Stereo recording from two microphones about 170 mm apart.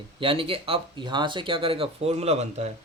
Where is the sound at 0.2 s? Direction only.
30° right (ahead or behind).